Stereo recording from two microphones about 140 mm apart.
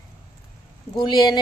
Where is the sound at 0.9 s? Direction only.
30° left (ahead or behind).